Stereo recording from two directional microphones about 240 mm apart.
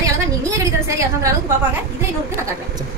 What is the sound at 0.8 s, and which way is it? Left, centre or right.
Speech, centre.